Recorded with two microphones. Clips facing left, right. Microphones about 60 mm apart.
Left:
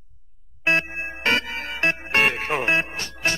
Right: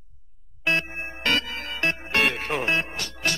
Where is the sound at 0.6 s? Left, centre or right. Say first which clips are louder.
Left 3 dB; left.